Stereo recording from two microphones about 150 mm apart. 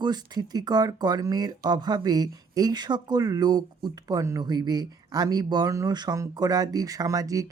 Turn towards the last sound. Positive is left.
turn(degrees=-20)  # may be behind; listen again after turning